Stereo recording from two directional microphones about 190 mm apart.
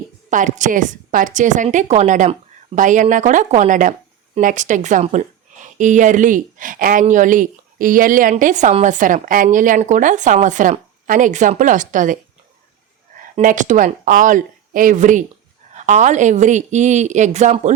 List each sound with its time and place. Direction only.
0.3 s a woman's voice: 40° right (ahead or behind)
13.1 s a woman's voice: 45° right (ahead or behind)